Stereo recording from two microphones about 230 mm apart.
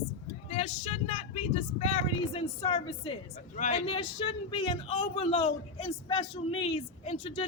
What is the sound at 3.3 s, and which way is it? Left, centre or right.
A man's voice, left.